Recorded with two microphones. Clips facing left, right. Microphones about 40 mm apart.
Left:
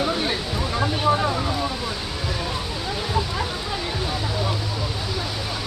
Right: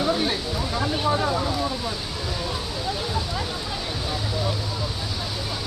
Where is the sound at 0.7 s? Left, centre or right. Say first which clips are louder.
Left 3 dB; centre.